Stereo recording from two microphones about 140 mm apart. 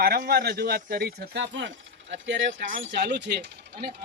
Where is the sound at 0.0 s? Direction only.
90° right.